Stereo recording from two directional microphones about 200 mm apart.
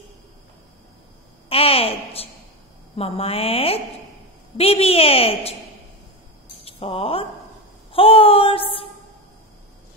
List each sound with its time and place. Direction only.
1.5 s a sound: 30° left (ahead or behind)
3.0 s a woman's voice: 30° left (ahead or behind)
6.6 s speech: 30° left (ahead or behind)